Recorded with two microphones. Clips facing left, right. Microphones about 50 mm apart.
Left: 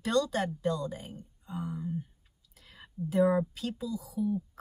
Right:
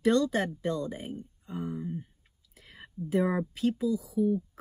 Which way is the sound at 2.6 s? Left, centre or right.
Right.